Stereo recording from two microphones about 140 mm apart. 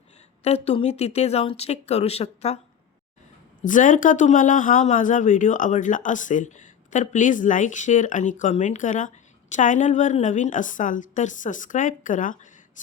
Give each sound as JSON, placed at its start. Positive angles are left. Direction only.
{"t": 0.4, "sound": "speech", "side_deg": 50}
{"t": 3.6, "sound": "speech", "side_deg": 70}